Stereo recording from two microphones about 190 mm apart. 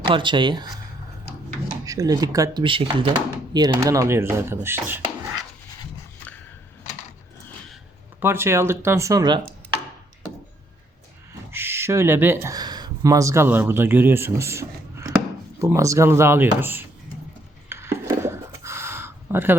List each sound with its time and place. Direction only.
0.0 s speech: 25° right (ahead or behind)
1.8 s speech: 20° right (ahead or behind)
8.2 s speech: 10° right (ahead or behind)
11.5 s speech: 10° right (ahead or behind)
17.7 s a sound: 15° right (ahead or behind)